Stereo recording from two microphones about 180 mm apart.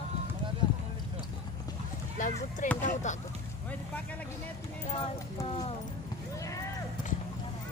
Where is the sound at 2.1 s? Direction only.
45° left (ahead or behind).